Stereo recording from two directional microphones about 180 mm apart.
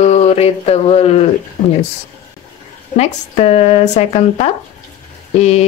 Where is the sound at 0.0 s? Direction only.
40° left (ahead or behind).